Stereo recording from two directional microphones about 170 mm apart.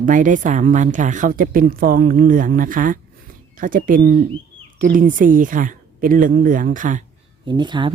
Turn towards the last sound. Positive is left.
turn(degrees=-25)  # may be behind; listen again after turning